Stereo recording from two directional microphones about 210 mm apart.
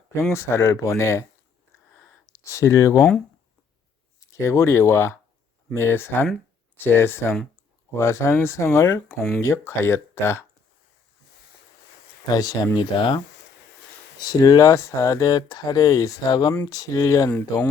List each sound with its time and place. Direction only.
0.1 s speech: 10° left (ahead or behind)
2.3 s speech: 15° left (ahead or behind)
4.4 s speech: 15° left (ahead or behind)
9.4 s speech: 15° left (ahead or behind)
12.3 s speech: 15° left (ahead or behind)
14.3 s speech: 15° left (ahead or behind)